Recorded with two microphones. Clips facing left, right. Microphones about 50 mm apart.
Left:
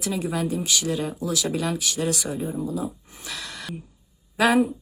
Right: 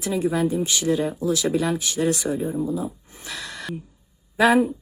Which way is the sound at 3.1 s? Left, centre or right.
Right.